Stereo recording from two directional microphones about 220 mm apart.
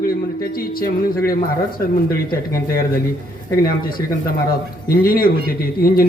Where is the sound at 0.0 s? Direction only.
40° left (ahead or behind).